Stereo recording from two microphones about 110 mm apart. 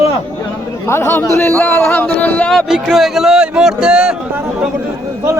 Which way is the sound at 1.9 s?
15° left (ahead or behind).